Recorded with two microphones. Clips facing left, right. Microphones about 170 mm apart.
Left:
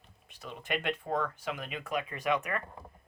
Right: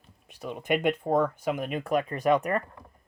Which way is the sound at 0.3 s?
50° right (ahead or behind).